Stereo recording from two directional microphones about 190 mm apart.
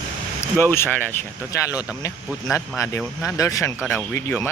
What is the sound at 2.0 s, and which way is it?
Speech, 15° left (ahead or behind).